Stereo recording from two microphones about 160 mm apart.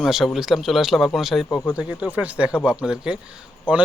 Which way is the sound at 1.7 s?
5° right (ahead or behind).